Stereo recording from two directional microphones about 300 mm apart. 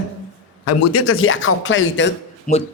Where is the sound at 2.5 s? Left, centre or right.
Left.